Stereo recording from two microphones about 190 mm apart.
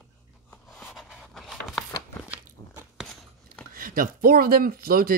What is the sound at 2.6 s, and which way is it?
Biting, 20° left (ahead or behind).